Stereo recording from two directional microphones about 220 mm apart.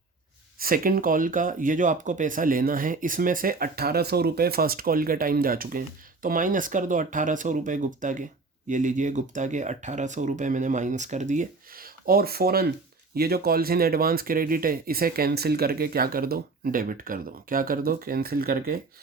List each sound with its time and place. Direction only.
0.6 s speech: 40° right (ahead or behind)